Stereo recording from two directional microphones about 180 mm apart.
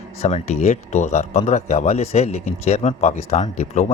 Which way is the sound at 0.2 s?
35° left (ahead or behind).